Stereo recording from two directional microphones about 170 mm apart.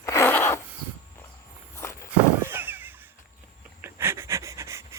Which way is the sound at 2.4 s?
10° right (ahead or behind).